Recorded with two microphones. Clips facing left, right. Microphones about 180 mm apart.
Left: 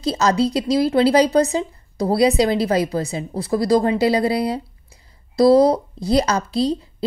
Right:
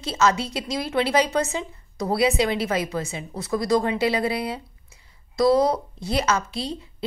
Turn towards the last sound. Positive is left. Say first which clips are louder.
# left 10 dB
turn(degrees=35)  # may be behind; listen again after turning